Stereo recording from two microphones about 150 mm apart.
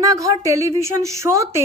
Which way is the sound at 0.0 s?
20° right (ahead or behind).